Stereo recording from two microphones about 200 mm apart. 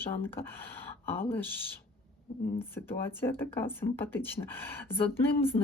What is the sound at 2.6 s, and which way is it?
Speech, 10° left (ahead or behind).